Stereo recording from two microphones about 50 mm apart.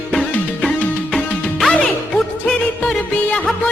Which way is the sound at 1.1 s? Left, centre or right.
Centre.